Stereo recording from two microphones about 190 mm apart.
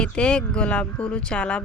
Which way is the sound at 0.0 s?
5° left (ahead or behind).